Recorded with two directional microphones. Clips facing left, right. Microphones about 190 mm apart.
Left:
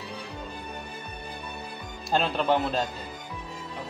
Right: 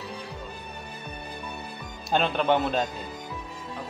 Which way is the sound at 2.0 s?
Centre (ahead or behind).